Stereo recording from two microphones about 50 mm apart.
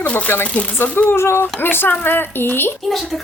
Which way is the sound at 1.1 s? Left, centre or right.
Left.